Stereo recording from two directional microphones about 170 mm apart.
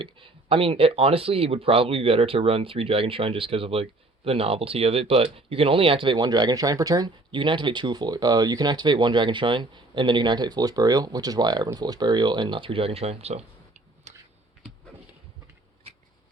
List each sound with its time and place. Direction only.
0.0 s speech: 30° right (ahead or behind)
14.1 s typing: 40° right (ahead or behind)